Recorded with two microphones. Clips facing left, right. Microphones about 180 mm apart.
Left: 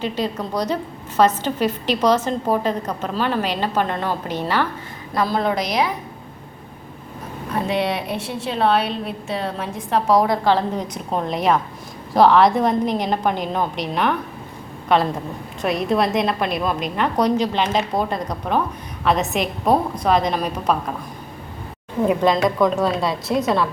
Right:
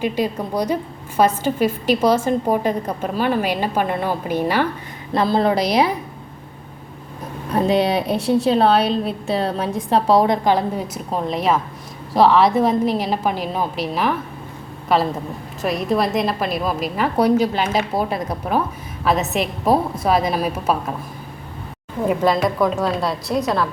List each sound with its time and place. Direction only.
0.0 s a woman's voice: 10° right (ahead or behind)
5.1 s a woman's voice: 30° right (ahead or behind)
7.7 s a woman's voice: 35° right (ahead or behind); by 10.8 s 15° right (ahead or behind)
10.9 s a woman's voice: centre (ahead or behind)
22.1 s a woman's voice: centre (ahead or behind)